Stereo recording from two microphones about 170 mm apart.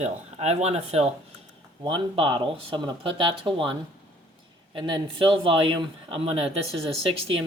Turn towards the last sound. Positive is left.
turn(degrees=-35)  # may be behind; listen again after turning